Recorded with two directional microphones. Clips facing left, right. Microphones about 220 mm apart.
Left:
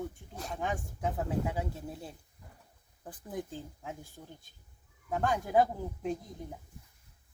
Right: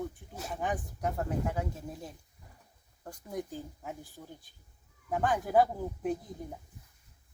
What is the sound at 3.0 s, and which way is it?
Speech, centre (ahead or behind).